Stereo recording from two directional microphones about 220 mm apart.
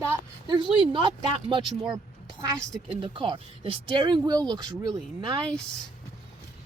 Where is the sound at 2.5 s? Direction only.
Centre (ahead or behind).